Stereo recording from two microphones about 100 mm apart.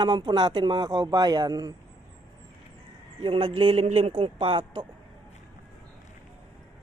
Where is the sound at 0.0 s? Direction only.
50° right (ahead or behind).